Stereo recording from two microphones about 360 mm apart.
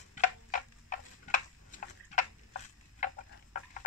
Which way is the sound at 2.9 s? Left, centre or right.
Left.